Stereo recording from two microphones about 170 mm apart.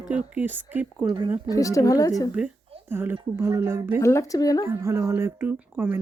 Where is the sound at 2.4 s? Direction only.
5° right (ahead or behind).